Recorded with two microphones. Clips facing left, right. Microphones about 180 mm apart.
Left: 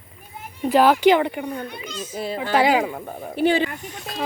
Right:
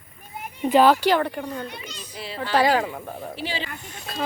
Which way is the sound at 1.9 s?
45° left (ahead or behind).